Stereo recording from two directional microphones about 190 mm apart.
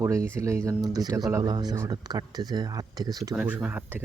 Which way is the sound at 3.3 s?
5° right (ahead or behind).